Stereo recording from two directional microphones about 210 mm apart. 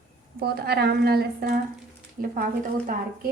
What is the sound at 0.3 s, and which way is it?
A woman's voice, 45° right (ahead or behind).